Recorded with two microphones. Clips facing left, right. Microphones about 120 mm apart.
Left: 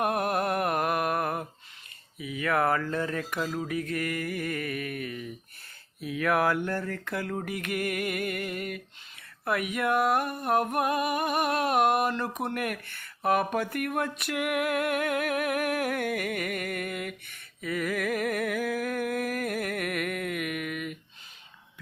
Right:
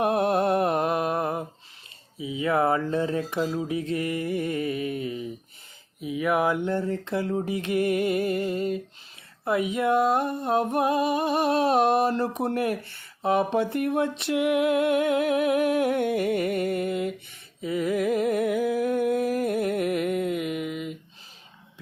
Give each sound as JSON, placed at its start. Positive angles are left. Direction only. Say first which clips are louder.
{"t": 0.0, "sound": "mantra", "louder": "right 5 dB", "side_deg": -30}
{"t": 2.1, "sound": "music", "louder": "right 3 dB", "side_deg": -20}